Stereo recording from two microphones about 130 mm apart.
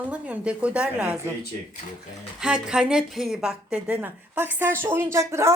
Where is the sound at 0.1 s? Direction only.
10° right (ahead or behind).